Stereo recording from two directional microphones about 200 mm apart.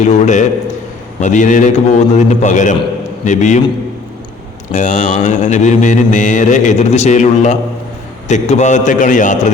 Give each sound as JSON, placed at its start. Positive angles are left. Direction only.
{"t": 0.0, "sound": "mantra", "side_deg": 35}
{"t": 4.7, "sound": "mantra", "side_deg": 35}